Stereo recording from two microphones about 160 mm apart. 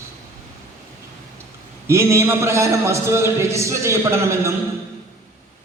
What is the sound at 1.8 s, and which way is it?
A man's voice, 15° right (ahead or behind).